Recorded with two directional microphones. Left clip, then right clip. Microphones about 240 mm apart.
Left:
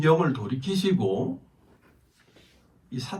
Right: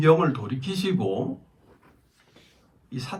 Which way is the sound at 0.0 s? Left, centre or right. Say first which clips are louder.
Right 3 dB; right.